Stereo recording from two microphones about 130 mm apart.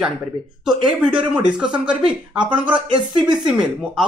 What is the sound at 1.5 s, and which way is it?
Speech, 5° right (ahead or behind).